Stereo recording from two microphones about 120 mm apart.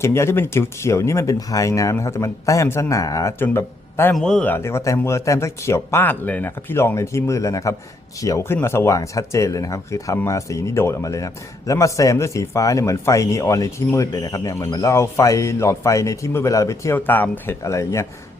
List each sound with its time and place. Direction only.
0.0 s speech: 20° left (ahead or behind)
4.1 s speech: 5° left (ahead or behind)
4.5 s speech: 25° left (ahead or behind)